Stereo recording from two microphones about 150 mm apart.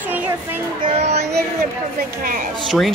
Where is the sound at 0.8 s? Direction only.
45° right (ahead or behind).